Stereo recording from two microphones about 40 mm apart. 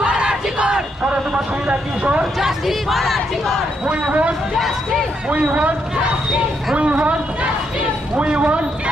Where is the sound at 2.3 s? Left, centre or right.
Centre.